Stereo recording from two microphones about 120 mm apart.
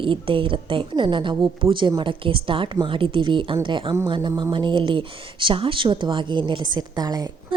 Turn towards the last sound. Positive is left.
turn(degrees=-35)  # may be behind; listen again after turning